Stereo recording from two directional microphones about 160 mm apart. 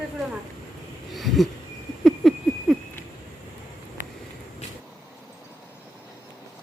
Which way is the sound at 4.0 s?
55° right (ahead or behind).